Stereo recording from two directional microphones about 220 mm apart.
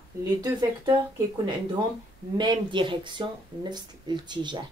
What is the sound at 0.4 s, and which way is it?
Speech, 20° right (ahead or behind).